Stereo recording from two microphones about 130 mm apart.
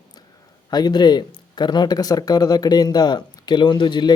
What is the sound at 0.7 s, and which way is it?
Speech, 35° left (ahead or behind).